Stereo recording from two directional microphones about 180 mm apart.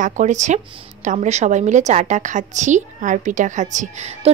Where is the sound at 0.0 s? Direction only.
40° right (ahead or behind).